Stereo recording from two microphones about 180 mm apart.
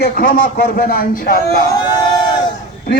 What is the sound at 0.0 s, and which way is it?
Speech, 50° left (ahead or behind).